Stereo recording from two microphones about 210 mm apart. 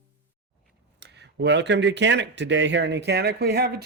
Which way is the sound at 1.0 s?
55° right (ahead or behind).